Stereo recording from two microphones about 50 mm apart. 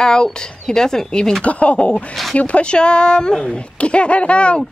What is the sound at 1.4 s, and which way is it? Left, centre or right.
Speech, left.